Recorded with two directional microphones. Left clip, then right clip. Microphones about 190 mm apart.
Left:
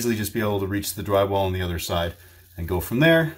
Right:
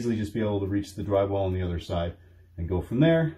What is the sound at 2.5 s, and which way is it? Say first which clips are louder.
Speech: left 3 dB; 5° left (ahead or behind).